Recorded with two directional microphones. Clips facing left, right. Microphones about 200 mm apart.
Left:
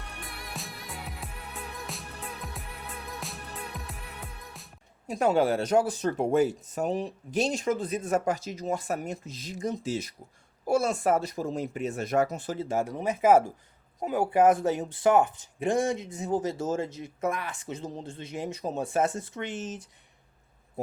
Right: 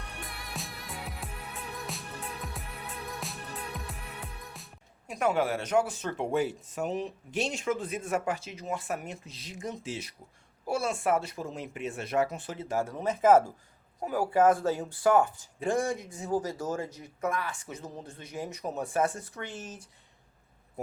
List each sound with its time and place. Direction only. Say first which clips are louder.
0.2 s music: even; centre (ahead or behind)
5.0 s speech: left 4 dB; 30° left (ahead or behind)
12.6 s speech: left 1 dB; 20° left (ahead or behind)